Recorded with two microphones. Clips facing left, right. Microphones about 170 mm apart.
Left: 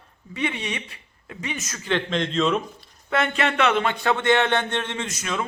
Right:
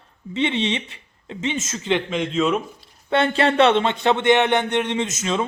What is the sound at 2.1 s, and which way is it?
Speech, 10° right (ahead or behind).